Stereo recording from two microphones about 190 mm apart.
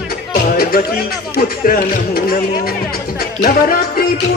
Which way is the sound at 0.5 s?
50° left (ahead or behind).